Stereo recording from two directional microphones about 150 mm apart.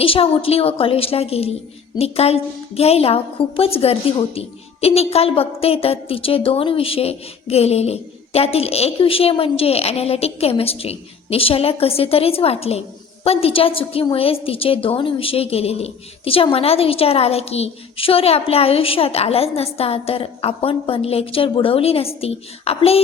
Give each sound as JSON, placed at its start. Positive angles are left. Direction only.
{"t": 0.0, "sound": "a woman's voice", "side_deg": 40}